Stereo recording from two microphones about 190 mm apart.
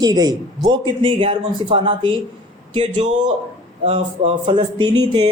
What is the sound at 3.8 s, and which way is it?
Speech, 30° right (ahead or behind).